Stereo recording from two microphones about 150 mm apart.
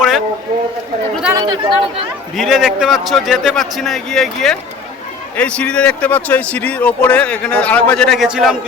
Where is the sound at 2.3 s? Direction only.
Centre (ahead or behind).